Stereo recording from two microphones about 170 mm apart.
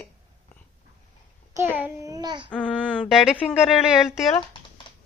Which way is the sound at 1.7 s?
15° right (ahead or behind).